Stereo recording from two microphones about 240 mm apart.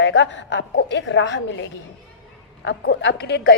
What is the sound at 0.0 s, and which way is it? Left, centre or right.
A woman's voice, left.